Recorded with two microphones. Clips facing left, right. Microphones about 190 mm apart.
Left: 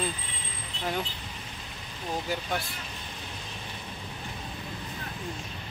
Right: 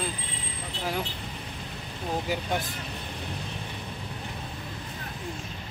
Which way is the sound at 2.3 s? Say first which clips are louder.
Right 2 dB; 15° right (ahead or behind).